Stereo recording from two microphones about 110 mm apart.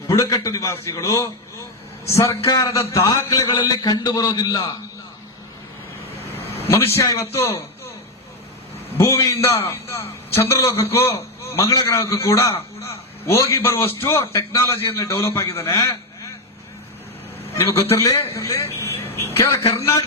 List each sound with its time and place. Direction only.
0.1 s a man's voice: 30° left (ahead or behind)
6.7 s a man's voice: 25° left (ahead or behind)
7.3 s a sound: 25° left (ahead or behind)
9.0 s a man's voice: 30° left (ahead or behind)
17.9 s a man's voice: 30° left (ahead or behind)